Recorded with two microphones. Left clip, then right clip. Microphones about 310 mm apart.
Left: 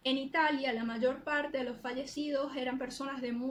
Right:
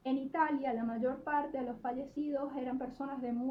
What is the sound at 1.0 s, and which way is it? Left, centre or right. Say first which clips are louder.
Speech: left 3 dB; centre.